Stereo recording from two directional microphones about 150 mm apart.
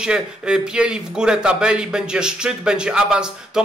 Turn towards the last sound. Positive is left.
turn(degrees=-5)  # may be behind; listen again after turning